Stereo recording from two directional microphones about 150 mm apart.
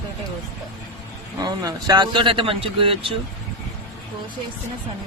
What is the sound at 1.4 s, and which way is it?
A man's voice, 25° right (ahead or behind).